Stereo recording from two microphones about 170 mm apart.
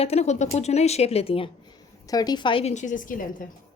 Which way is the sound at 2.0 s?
20° left (ahead or behind).